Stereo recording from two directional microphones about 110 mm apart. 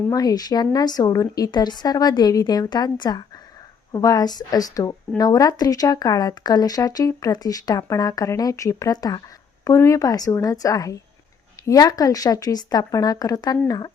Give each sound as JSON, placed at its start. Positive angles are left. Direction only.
{"t": 0.1, "sound": "speech", "side_deg": 35}